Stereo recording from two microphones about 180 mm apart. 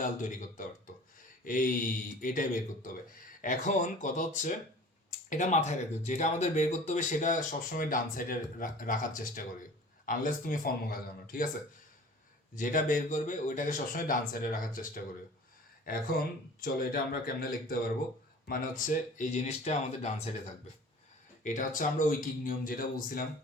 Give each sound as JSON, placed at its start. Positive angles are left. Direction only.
{"t": 0.0, "sound": "speech", "side_deg": 45}
{"t": 12.5, "sound": "speech", "side_deg": 50}
{"t": 21.4, "sound": "speech", "side_deg": 45}